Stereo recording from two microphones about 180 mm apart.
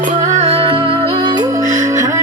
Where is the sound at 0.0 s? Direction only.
40° right (ahead or behind).